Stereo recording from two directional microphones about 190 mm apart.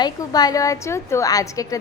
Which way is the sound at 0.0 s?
20° left (ahead or behind).